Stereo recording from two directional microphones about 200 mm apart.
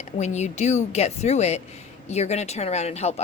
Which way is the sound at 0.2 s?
35° left (ahead or behind).